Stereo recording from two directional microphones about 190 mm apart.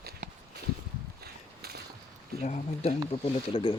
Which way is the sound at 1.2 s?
55° right (ahead or behind).